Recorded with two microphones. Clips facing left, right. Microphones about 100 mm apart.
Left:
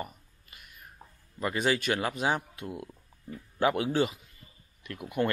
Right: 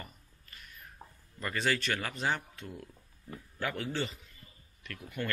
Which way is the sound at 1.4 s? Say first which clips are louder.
Left 4 dB; 10° left (ahead or behind).